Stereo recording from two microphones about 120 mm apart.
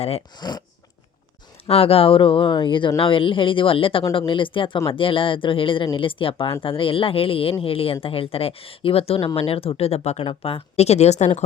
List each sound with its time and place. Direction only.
0.3 s speech: 35° left (ahead or behind)
1.6 s speech: 55° left (ahead or behind)